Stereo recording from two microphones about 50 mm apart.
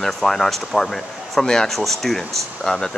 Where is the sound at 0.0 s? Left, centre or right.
Centre.